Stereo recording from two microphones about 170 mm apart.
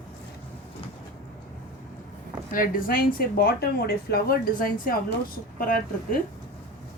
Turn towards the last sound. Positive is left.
turn(degrees=55)  # may be behind; listen again after turning